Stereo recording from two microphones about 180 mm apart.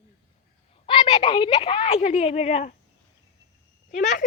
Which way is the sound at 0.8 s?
30° left (ahead or behind).